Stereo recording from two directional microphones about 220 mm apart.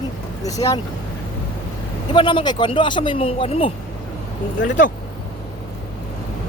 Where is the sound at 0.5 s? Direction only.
15° left (ahead or behind).